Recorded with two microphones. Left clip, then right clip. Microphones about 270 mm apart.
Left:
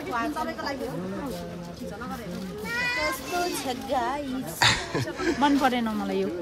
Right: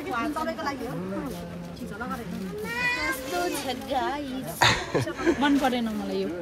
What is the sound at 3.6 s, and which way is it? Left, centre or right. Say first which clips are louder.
Speech: left 1 dB; centre.